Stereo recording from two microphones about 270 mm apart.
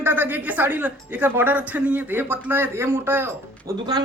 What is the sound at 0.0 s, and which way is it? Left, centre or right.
A woman's voice, centre.